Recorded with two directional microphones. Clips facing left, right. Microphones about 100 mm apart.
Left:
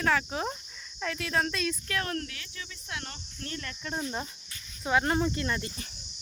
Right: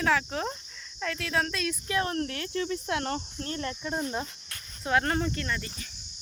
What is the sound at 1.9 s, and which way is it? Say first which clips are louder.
Speech: right 4 dB; 25° right (ahead or behind).